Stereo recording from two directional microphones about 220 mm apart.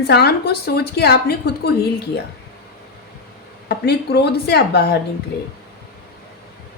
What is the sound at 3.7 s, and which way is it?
A woman's voice, 50° left (ahead or behind).